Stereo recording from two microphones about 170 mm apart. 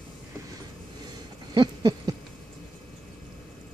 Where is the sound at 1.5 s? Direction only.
25° right (ahead or behind).